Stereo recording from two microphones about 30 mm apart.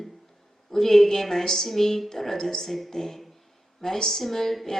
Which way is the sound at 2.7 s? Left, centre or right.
Centre.